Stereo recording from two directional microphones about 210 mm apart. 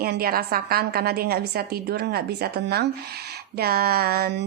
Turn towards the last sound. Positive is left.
turn(degrees=-50)  # may be behind; listen again after turning